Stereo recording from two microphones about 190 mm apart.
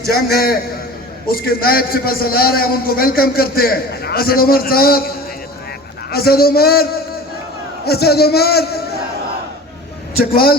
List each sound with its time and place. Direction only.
0.0 s a man's voice: 55° left (ahead or behind)
6.1 s a man's voice: 55° left (ahead or behind)
7.9 s a man's voice: 55° left (ahead or behind)
10.3 s a man's voice: 50° left (ahead or behind)